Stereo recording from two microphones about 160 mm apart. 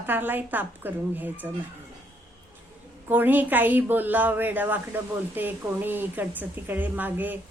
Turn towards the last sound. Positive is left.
turn(degrees=-10)  # may be behind; listen again after turning